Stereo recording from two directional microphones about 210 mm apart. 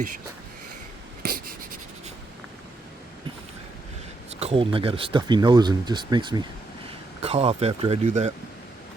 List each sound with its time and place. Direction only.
1.2 s writing: 45° right (ahead or behind)
4.4 s speech: 25° right (ahead or behind)